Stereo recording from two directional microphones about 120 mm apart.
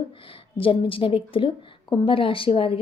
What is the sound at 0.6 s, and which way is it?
A woman's voice, 50° left (ahead or behind).